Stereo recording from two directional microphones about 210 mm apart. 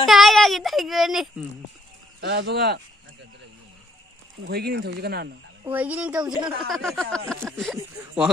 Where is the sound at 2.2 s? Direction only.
55° right (ahead or behind).